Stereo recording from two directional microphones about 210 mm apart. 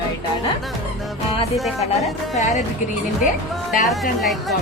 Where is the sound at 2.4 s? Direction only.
35° left (ahead or behind).